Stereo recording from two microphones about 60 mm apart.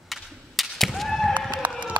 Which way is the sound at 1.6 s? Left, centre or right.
Right.